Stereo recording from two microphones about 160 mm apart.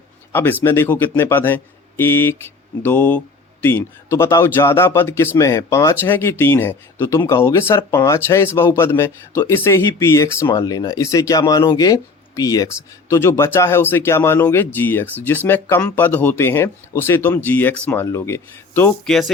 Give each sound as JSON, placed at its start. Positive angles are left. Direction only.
{"t": 0.6, "sound": "speech", "side_deg": 15}
{"t": 19.0, "sound": "speech", "side_deg": 0}